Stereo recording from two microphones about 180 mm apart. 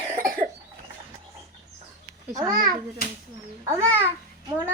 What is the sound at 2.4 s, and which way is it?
Speech, 50° right (ahead or behind).